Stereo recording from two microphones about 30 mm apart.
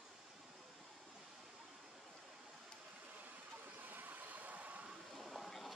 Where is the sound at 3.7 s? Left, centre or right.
Right.